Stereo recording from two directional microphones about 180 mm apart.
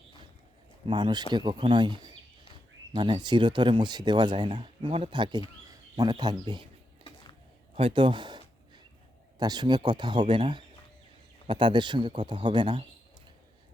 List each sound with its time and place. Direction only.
0.9 s speech: 25° right (ahead or behind)
7.8 s a sound: 30° right (ahead or behind)
9.4 s speech: 25° right (ahead or behind)